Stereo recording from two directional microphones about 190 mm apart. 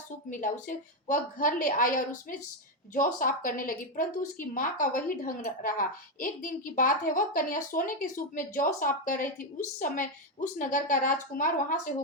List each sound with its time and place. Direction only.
0.3 s a woman's voice: 45° left (ahead or behind)